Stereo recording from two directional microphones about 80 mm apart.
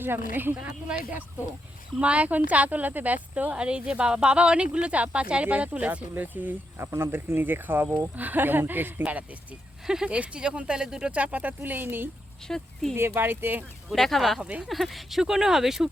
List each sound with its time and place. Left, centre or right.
0.0 s speech: right
9.8 s speech: centre; by 12.0 s right
12.5 s speech: centre
13.0 s speech: right
13.9 s speech: centre